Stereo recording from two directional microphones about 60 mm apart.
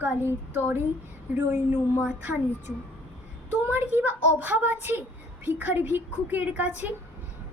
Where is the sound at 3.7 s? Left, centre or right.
Right.